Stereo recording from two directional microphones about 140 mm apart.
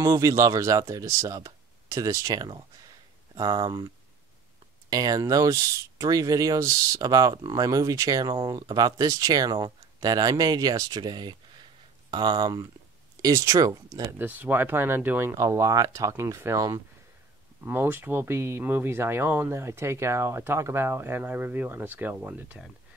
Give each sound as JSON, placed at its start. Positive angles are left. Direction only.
{"t": 0.0, "sound": "speech", "side_deg": -25}
{"t": 14.1, "sound": "speech", "side_deg": -15}